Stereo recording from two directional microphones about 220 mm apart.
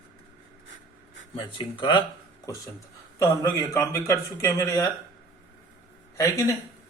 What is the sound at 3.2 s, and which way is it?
Speech, 15° left (ahead or behind).